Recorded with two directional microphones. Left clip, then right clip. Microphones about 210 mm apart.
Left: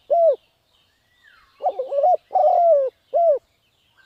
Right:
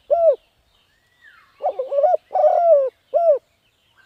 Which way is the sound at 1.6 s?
Centre (ahead or behind).